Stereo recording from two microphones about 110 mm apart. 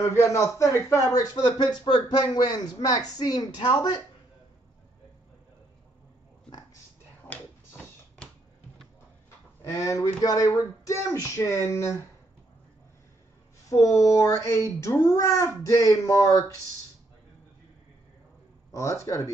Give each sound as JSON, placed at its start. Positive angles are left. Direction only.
{"t": 0.0, "sound": "speech", "side_deg": 25}
{"t": 7.2, "sound": "a sound", "side_deg": 15}
{"t": 9.7, "sound": "speech", "side_deg": 30}
{"t": 13.7, "sound": "speech", "side_deg": 30}
{"t": 18.7, "sound": "speech", "side_deg": 30}